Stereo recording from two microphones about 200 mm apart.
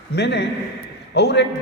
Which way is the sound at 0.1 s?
60° left (ahead or behind).